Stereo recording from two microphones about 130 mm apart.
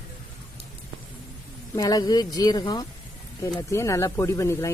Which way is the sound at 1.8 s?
30° left (ahead or behind).